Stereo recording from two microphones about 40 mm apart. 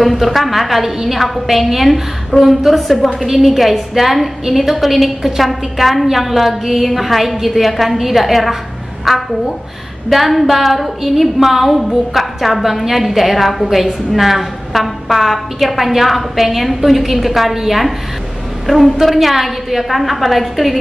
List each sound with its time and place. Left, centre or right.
0.0 s a woman's voice: centre